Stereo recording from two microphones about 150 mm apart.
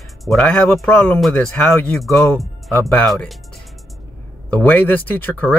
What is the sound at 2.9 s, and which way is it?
Speech, 5° left (ahead or behind).